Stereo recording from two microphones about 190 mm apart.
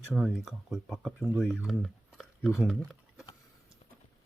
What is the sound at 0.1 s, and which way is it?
Speech, centre (ahead or behind).